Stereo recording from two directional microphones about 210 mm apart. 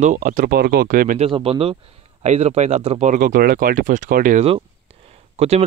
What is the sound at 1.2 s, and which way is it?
Speech, 25° right (ahead or behind).